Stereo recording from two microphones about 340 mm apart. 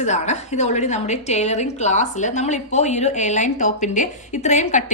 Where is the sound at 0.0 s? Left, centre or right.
Centre.